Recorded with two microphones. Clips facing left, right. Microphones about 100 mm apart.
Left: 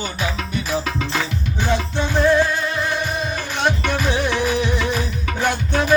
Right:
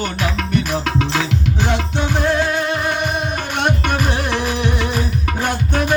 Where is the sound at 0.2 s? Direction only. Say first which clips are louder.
Right 5 dB; 65° right (ahead or behind).